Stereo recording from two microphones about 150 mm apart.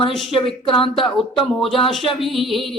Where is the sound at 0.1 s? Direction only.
Centre (ahead or behind).